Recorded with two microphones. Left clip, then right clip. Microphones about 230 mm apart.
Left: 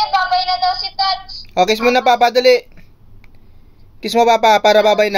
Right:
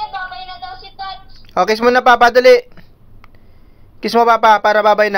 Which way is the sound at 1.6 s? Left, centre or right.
Right.